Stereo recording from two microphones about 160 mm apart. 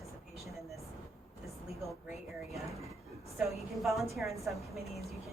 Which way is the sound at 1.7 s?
Centre (ahead or behind).